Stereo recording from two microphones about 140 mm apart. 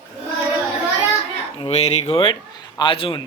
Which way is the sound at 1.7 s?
50° left (ahead or behind).